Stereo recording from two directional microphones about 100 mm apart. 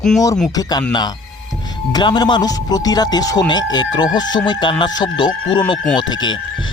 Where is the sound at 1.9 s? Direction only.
45° left (ahead or behind).